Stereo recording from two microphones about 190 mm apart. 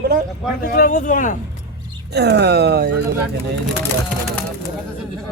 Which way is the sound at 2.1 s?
60° right (ahead or behind).